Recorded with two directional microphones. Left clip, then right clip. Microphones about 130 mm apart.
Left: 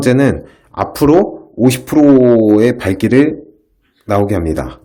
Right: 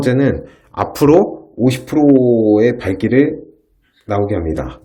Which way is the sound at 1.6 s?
45° left (ahead or behind).